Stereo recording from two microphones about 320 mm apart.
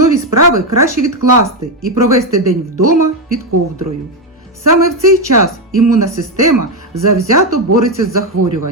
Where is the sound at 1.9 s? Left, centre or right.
Right.